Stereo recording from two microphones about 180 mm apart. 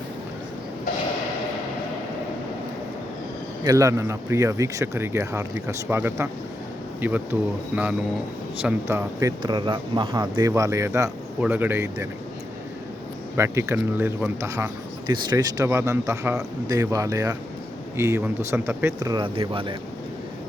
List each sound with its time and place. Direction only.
3.6 s a man's voice: 20° right (ahead or behind)
13.3 s a man's voice: 15° right (ahead or behind)